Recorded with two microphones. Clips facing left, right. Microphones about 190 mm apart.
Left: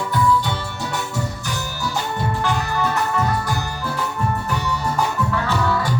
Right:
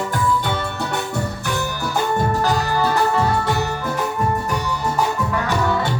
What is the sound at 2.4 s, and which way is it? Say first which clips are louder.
Music: right 3 dB; 35° right (ahead or behind).